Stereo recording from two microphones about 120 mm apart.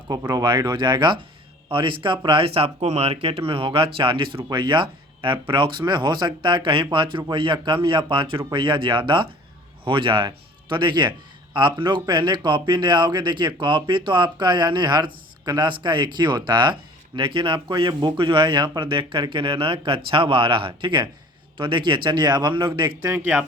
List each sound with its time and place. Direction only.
0.1 s speech: 30° right (ahead or behind)
23.1 s speech: 20° right (ahead or behind)